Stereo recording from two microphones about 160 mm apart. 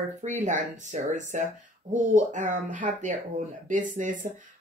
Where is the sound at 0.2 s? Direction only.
50° right (ahead or behind).